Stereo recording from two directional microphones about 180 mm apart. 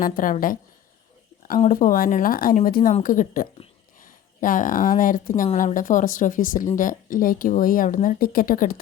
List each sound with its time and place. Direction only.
0.0 s speech: 50° left (ahead or behind)
1.5 s speech: 45° left (ahead or behind)